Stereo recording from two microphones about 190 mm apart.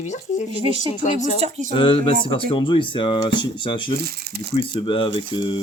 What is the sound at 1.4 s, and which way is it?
Speech, 40° right (ahead or behind).